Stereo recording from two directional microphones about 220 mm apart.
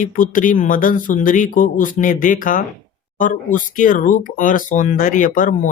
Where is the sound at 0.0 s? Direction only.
35° left (ahead or behind).